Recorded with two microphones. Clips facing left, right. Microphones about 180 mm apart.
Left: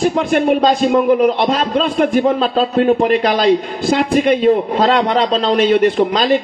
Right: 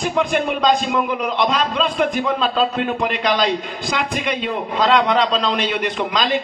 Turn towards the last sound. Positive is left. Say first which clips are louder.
# left 8 dB
turn(degrees=45)  # may be behind; listen again after turning